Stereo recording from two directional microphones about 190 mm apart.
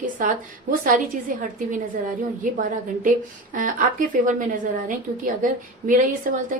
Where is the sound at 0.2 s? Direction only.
45° right (ahead or behind).